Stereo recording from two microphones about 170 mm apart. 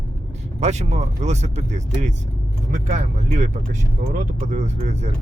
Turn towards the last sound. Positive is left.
turn(degrees=-40)  # may be behind; listen again after turning